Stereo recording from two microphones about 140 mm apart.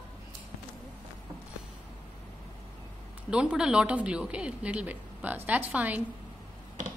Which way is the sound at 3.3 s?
5° right (ahead or behind).